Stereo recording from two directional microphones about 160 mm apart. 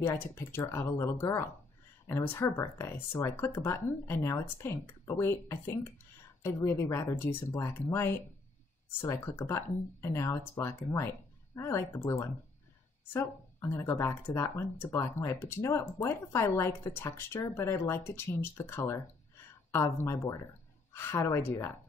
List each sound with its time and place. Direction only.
0.0 s speech: 15° left (ahead or behind)